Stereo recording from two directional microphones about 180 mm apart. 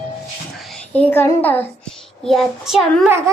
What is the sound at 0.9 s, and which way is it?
A woman's voice, 10° left (ahead or behind).